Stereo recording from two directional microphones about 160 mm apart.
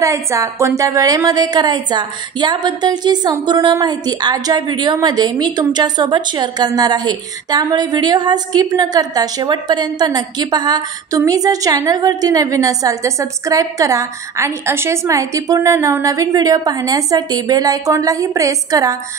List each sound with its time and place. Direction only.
0.0 s a woman's voice: 20° right (ahead or behind)